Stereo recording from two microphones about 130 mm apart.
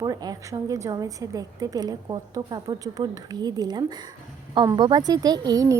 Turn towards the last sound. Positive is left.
turn(degrees=-30)  # may be behind; listen again after turning